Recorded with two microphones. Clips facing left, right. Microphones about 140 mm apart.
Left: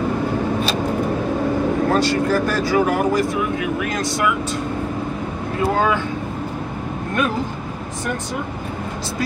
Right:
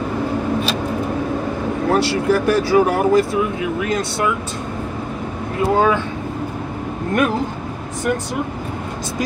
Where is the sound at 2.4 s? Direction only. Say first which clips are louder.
Right 3 dB; 30° right (ahead or behind).